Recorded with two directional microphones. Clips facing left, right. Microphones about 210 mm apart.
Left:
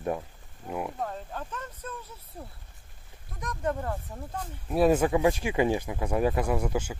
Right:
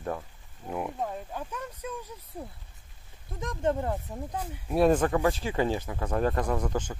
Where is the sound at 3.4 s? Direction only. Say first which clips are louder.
Right 3 dB; 25° right (ahead or behind).